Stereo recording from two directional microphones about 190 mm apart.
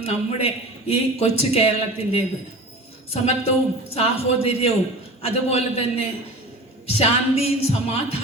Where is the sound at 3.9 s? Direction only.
30° left (ahead or behind).